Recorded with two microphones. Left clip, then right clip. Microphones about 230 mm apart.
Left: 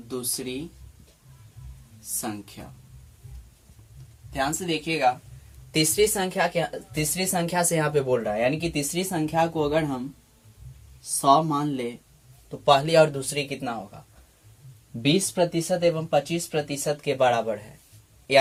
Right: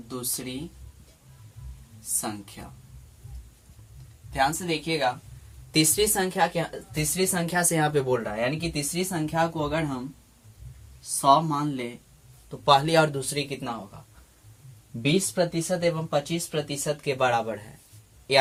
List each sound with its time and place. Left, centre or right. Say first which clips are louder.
0.1 s a woman's voice: left 3 dB; right
4.3 s a woman's voice: right 2 dB; right
11.2 s a woman's voice: left 1 dB; centre
15.0 s speech: left 2 dB; centre
15.7 s a woman's voice: left 3 dB; right